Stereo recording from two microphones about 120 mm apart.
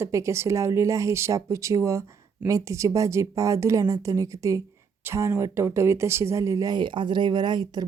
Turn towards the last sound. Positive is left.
turn(degrees=-35)  # may be behind; listen again after turning